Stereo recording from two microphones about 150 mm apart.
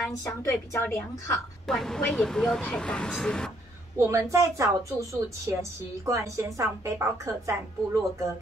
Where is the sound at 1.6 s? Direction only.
5° left (ahead or behind).